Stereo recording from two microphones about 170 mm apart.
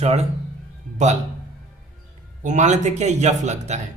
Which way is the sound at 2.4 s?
45° right (ahead or behind).